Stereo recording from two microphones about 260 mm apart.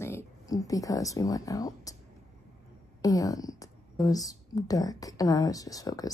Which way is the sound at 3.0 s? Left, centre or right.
Centre.